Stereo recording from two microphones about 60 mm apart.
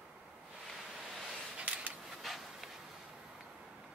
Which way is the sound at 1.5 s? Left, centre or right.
Centre.